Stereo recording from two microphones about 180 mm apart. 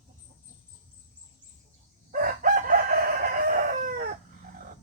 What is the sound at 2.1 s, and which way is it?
Chicken, 50° right (ahead or behind).